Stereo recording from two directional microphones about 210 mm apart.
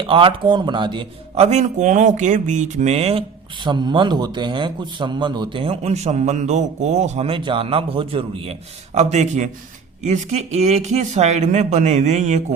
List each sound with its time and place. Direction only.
0.1 s speech: 25° right (ahead or behind)